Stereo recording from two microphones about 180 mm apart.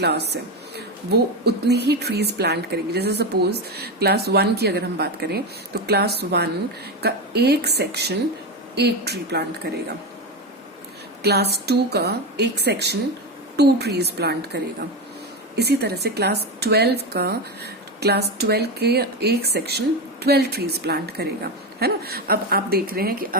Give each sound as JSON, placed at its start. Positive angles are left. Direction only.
{"t": 0.0, "sound": "speech", "side_deg": -65}
{"t": 11.2, "sound": "speech", "side_deg": -65}